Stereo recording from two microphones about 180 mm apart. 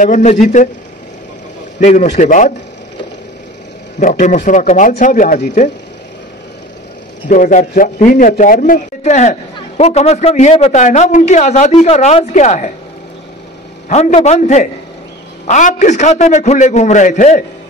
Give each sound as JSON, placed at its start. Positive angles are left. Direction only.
{"t": 0.0, "sound": "speech", "side_deg": 40}
{"t": 1.8, "sound": "a man's voice", "side_deg": 40}
{"t": 4.0, "sound": "speech", "side_deg": 45}
{"t": 7.2, "sound": "a man's voice", "side_deg": 45}
{"t": 13.8, "sound": "a man's voice", "side_deg": 40}